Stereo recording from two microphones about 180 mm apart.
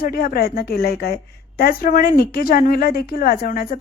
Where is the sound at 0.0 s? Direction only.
55° left (ahead or behind).